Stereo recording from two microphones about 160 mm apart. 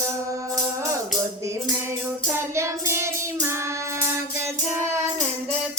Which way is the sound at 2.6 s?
15° right (ahead or behind).